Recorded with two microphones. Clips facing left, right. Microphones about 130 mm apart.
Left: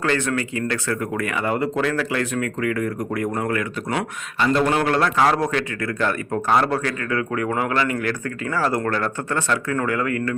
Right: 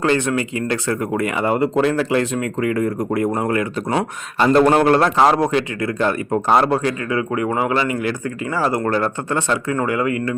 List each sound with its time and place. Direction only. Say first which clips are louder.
0.0 s a man's voice: right 4 dB; 20° right (ahead or behind)